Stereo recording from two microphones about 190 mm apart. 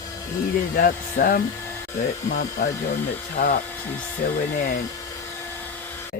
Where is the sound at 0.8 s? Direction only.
50° left (ahead or behind).